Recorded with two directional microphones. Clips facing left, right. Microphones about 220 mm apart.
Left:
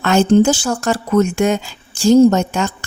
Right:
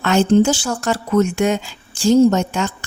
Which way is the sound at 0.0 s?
45° left (ahead or behind).